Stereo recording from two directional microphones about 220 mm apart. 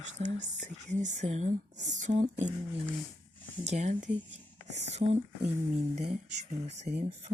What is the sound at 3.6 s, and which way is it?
Speech, 30° right (ahead or behind).